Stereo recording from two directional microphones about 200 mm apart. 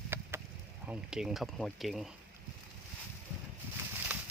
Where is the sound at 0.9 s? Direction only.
5° right (ahead or behind).